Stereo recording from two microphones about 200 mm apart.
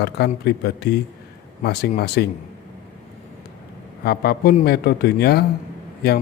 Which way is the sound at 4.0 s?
50° left (ahead or behind).